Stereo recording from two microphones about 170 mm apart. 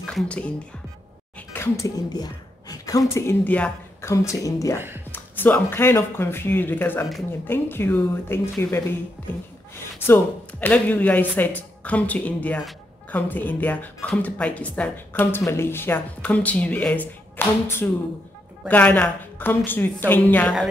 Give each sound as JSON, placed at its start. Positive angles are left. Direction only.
{"t": 0.0, "sound": "speech", "side_deg": 5}
{"t": 1.5, "sound": "speech", "side_deg": 15}
{"t": 10.0, "sound": "speech", "side_deg": 15}